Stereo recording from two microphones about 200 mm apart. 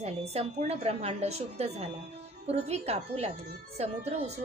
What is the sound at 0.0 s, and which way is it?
A woman's voice, 30° right (ahead or behind).